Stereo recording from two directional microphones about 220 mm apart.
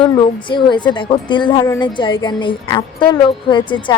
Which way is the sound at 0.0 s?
20° left (ahead or behind).